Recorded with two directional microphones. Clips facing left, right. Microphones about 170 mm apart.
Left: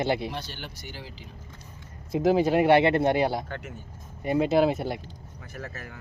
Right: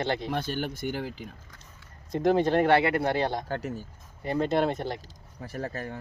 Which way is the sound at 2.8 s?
20° left (ahead or behind).